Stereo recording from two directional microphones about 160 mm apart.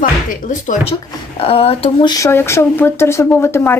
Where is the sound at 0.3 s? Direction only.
55° left (ahead or behind).